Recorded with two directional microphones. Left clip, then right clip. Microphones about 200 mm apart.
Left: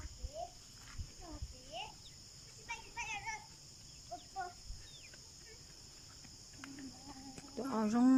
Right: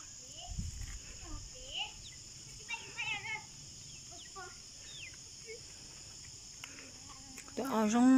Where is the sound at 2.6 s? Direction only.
60° left (ahead or behind).